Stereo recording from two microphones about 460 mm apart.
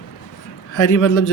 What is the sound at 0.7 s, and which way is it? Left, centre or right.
Speech, left.